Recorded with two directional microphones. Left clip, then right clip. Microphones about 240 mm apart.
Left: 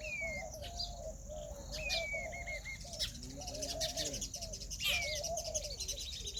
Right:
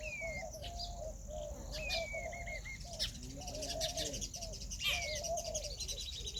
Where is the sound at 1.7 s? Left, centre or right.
Centre.